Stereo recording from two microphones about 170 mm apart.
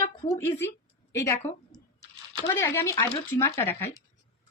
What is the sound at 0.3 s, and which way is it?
A woman's voice, 15° left (ahead or behind).